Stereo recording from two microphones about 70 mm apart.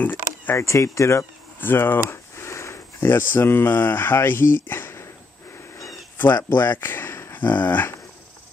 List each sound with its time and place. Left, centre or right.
0.0 s a sound: left
0.6 s speech: left
1.6 s a sound: left
3.0 s speech: left
6.1 s speech: left
7.3 s speech: left